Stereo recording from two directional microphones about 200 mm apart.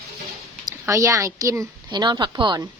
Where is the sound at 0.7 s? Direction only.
15° right (ahead or behind).